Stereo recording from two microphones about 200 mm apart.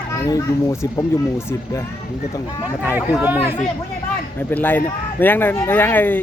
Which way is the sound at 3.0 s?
10° right (ahead or behind).